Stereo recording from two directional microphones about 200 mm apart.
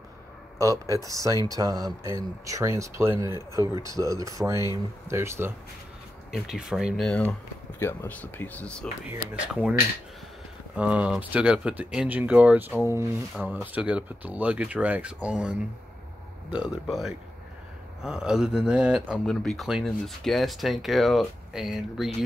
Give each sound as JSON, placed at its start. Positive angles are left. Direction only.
{"t": 0.6, "sound": "speech", "side_deg": -15}
{"t": 6.3, "sound": "speech", "side_deg": 0}
{"t": 9.3, "sound": "speech", "side_deg": -5}
{"t": 10.8, "sound": "speech", "side_deg": -5}